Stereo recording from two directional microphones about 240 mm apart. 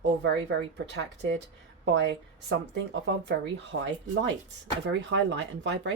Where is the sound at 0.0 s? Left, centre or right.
Right.